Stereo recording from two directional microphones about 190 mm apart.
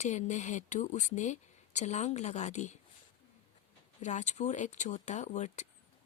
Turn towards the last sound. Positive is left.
turn(degrees=40)  # may be behind; listen again after turning